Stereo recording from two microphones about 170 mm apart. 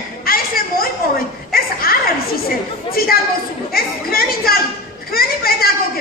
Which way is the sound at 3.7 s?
60° left (ahead or behind).